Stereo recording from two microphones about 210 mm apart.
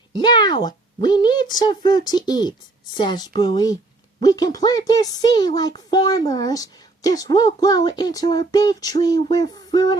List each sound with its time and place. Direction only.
0.2 s speech: 20° left (ahead or behind)